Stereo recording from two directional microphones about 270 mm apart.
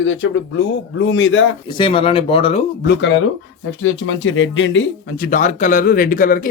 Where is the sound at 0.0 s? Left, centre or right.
Left.